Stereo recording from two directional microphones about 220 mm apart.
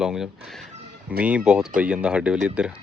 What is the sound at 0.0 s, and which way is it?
Speech, centre (ahead or behind).